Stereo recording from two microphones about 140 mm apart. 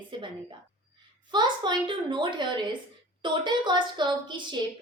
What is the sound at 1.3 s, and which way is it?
A woman's voice, 35° right (ahead or behind).